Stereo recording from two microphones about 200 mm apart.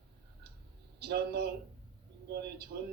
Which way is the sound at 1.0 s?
55° right (ahead or behind).